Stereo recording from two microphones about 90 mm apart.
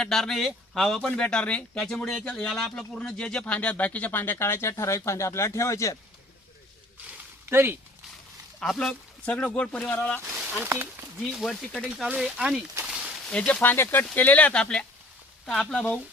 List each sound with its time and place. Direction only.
0.0 s speech: 5° left (ahead or behind); by 6.0 s 35° left (ahead or behind)
7.5 s speech: 25° right (ahead or behind)
8.6 s speech: centre (ahead or behind)
8.9 s speech: 15° left (ahead or behind)
11.2 s speech: centre (ahead or behind)
12.1 s speech: 10° right (ahead or behind)
12.8 s a sound: 10° right (ahead or behind)
13.3 s speech: 15° left (ahead or behind)